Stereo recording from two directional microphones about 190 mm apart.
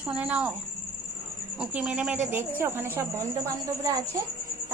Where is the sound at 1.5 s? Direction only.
5° right (ahead or behind).